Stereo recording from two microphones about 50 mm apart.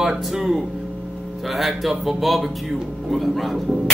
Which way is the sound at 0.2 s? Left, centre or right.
Centre.